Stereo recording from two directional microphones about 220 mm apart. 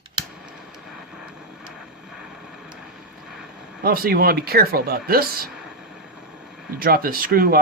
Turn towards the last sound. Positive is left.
turn(degrees=-40)  # may be behind; listen again after turning